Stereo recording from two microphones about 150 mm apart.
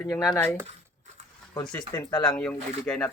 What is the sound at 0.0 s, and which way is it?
Speech, 25° left (ahead or behind).